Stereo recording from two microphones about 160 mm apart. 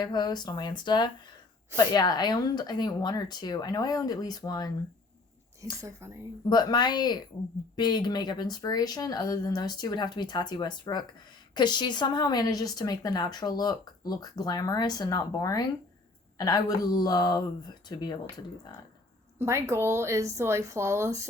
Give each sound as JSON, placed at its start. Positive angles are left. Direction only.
{"t": 0.0, "sound": "speech", "side_deg": 25}
{"t": 5.8, "sound": "speech", "side_deg": -20}
{"t": 6.5, "sound": "speech", "side_deg": 25}
{"t": 19.4, "sound": "speech", "side_deg": -15}